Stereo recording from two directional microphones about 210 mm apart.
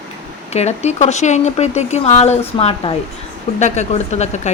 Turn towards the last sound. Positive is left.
turn(degrees=30)  # may be behind; listen again after turning